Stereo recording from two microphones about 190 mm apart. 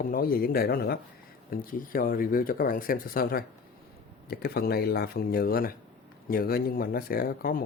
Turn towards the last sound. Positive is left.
turn(degrees=50)  # may be behind; listen again after turning